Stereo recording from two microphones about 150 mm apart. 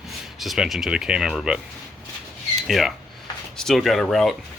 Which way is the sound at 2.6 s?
Centre (ahead or behind).